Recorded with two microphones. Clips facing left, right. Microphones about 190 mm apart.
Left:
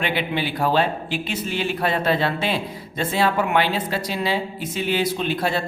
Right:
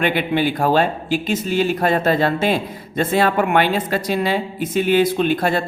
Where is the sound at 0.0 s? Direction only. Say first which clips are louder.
Right 6 dB; 50° right (ahead or behind).